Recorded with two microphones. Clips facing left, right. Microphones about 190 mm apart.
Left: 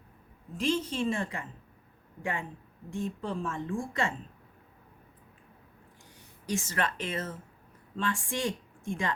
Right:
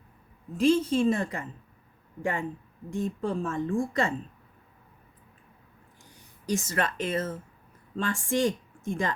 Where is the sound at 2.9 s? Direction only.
45° right (ahead or behind).